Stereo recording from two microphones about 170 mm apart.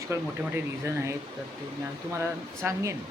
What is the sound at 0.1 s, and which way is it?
Speech, 15° right (ahead or behind).